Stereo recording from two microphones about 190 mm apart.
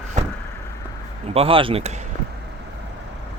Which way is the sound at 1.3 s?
30° right (ahead or behind).